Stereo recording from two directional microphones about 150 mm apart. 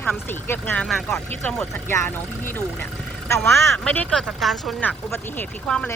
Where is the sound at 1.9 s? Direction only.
15° left (ahead or behind).